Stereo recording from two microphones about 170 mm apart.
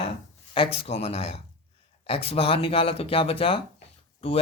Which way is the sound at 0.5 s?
35° left (ahead or behind).